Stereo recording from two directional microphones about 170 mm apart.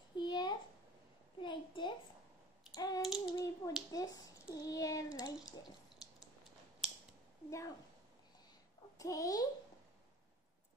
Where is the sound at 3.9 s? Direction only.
20° left (ahead or behind).